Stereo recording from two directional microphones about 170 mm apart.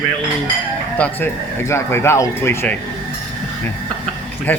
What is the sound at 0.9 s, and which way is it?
Speech, 10° left (ahead or behind).